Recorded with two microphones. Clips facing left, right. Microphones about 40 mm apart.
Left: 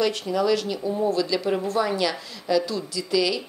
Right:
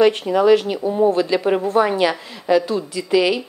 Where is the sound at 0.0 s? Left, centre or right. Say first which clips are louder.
Right 8 dB; right.